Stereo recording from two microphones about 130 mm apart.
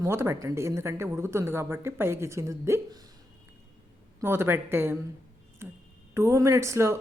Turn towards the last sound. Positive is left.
turn(degrees=-20)  # may be behind; listen again after turning